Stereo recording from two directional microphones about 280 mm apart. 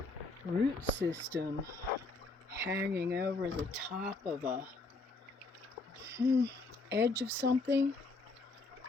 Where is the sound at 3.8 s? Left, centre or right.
Centre.